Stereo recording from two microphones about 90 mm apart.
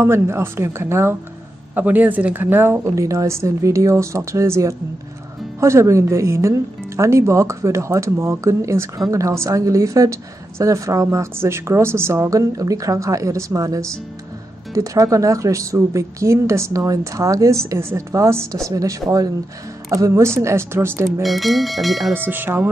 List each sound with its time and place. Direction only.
0.0 s speech: 30° right (ahead or behind)
1.8 s speech: 20° right (ahead or behind)
21.2 s speech: centre (ahead or behind)
22.1 s speech: 20° right (ahead or behind)